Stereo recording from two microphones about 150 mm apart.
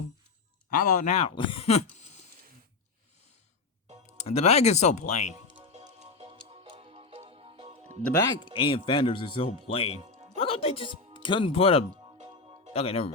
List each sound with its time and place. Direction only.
0.7 s speech: 65° left (ahead or behind)
1.2 s speech: 40° left (ahead or behind)
4.2 s speech: 45° left (ahead or behind)
5.5 s music: 35° right (ahead or behind)
5.7 s music: 50° right (ahead or behind)
8.1 s speech: 20° left (ahead or behind)
8.5 s speech: 35° left (ahead or behind)
10.0 s music: 45° right (ahead or behind)
10.3 s speech: 40° left (ahead or behind)
12.3 s music: 35° right (ahead or behind)
12.7 s speech: 40° left (ahead or behind)